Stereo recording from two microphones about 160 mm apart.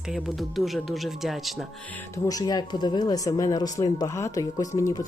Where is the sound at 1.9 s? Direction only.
15° left (ahead or behind).